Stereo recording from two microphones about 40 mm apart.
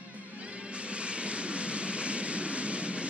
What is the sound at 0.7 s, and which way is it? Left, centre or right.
Train, right.